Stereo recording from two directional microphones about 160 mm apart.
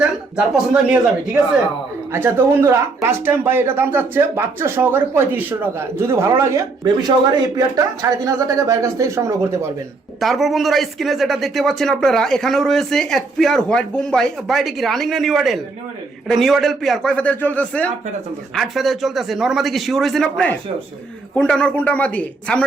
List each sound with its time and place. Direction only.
0.3 s speech: 5° right (ahead or behind); by 7.1 s 20° right (ahead or behind)
8.2 s speech: 20° right (ahead or behind)
10.2 s a man's voice: centre (ahead or behind)